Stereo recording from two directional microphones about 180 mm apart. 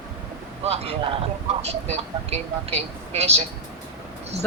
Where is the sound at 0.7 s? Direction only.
35° right (ahead or behind).